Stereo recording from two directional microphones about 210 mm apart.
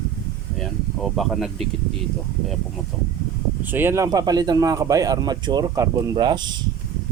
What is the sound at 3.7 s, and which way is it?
Speech, 10° right (ahead or behind).